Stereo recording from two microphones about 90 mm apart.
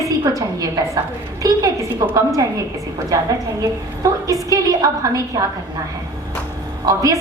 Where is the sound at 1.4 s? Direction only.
40° right (ahead or behind).